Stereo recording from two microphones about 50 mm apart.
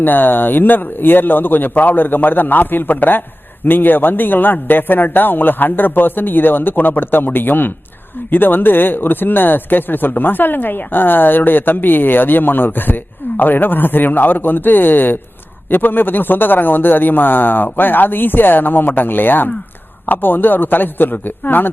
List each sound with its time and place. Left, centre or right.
0.0 s speech: left